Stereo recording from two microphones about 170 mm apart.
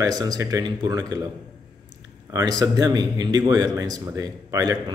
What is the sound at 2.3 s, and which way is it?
A man's voice, 20° right (ahead or behind).